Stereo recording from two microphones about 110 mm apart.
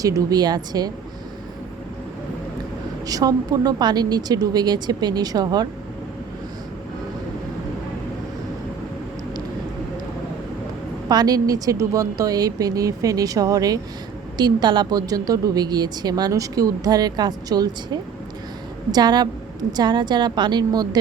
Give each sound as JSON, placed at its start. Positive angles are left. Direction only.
{"t": 0.0, "sound": "a woman's voice", "side_deg": -30}
{"t": 3.1, "sound": "a woman's voice", "side_deg": -35}
{"t": 11.1, "sound": "a woman's voice", "side_deg": -35}